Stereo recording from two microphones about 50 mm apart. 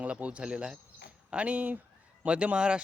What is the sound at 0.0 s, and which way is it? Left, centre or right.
Speech, right.